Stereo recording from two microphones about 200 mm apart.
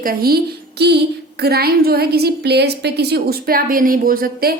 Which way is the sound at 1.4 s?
50° right (ahead or behind).